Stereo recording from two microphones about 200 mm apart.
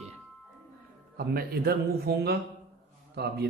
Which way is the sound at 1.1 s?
50° right (ahead or behind).